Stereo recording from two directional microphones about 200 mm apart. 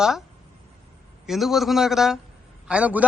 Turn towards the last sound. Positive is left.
turn(degrees=-5)  # may be behind; listen again after turning